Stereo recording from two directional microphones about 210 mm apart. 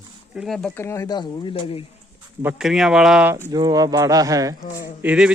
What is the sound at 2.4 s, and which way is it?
Speech, centre (ahead or behind).